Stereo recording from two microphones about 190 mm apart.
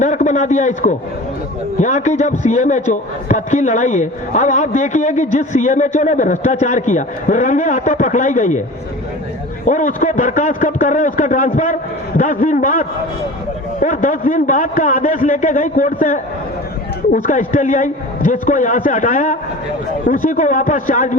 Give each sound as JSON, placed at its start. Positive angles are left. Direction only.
{"t": 0.0, "sound": "a man's voice", "side_deg": 40}
{"t": 9.6, "sound": "a man's voice", "side_deg": 40}